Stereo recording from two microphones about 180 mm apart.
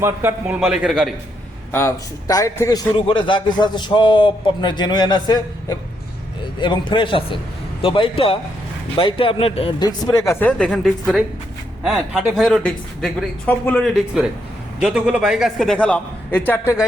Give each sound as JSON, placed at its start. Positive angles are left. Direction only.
{"t": 0.0, "sound": "a man's voice", "side_deg": -10}
{"t": 1.7, "sound": "a man's voice", "side_deg": 15}
{"t": 10.2, "sound": "a man's voice", "side_deg": 5}
{"t": 14.8, "sound": "a man's voice", "side_deg": -5}